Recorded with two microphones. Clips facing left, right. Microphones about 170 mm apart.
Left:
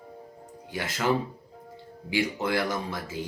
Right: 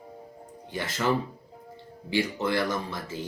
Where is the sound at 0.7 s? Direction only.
10° left (ahead or behind).